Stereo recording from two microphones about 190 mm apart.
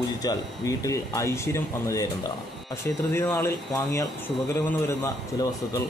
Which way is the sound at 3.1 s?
15° left (ahead or behind).